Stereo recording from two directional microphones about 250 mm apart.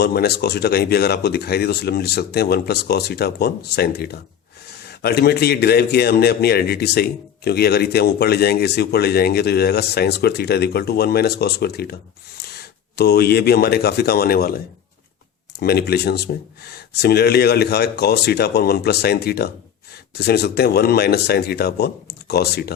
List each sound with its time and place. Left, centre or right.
0.0 s a man's voice: left
15.6 s a man's voice: left